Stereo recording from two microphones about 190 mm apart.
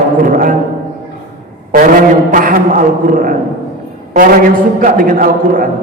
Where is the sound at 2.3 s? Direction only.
45° right (ahead or behind).